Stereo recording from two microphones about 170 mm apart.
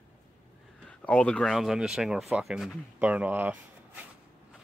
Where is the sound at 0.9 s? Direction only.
5° left (ahead or behind); by 3.5 s 10° right (ahead or behind).